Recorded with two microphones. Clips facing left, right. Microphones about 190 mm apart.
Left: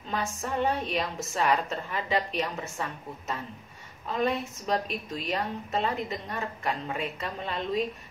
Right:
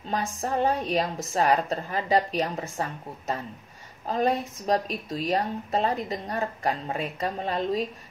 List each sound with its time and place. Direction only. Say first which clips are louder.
0.1 s speech: right 3 dB; 35° right (ahead or behind)
4.0 s speech: right 3 dB; 40° right (ahead or behind)